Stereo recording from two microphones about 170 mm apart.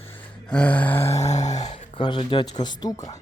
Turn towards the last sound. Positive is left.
turn(degrees=20)  # may be behind; listen again after turning